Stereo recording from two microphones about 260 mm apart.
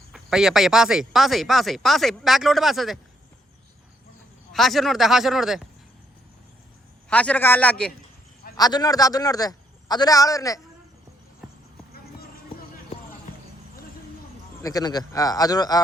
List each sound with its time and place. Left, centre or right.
0.1 s speech: centre
4.5 s speech: centre
7.1 s speech: centre
8.5 s a man's voice: centre
14.6 s a man's voice: centre